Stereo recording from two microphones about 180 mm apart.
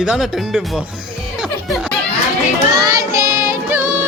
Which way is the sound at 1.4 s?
Centre (ahead or behind).